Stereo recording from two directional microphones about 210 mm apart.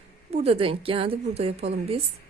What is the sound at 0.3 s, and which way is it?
A woman's voice, 30° right (ahead or behind).